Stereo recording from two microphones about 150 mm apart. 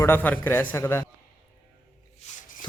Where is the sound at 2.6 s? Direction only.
30° left (ahead or behind).